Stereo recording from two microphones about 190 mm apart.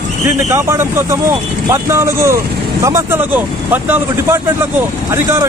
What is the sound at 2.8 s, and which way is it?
Speech, 15° right (ahead or behind).